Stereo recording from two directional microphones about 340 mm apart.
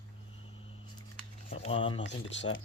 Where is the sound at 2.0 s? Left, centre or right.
Left.